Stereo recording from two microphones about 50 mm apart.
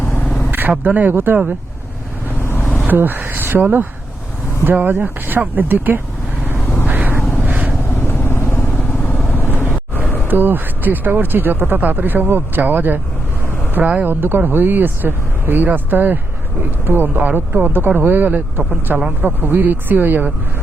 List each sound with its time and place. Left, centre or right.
0.9 s speech: right
2.4 s vehicle: left
2.8 s speech: right
6.8 s vehicle: right
7.4 s cat: right
8.0 s vehicle: left
10.2 s speech: right
14.0 s speech: right
18.9 s speech: right
19.2 s speech: right